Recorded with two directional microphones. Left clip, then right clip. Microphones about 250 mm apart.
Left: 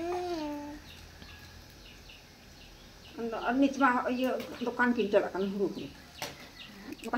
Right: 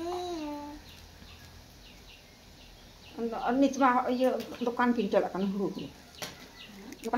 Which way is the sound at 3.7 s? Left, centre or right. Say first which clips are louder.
Right 2 dB; centre.